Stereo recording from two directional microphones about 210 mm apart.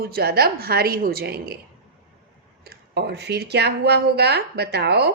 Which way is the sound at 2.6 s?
50° right (ahead or behind).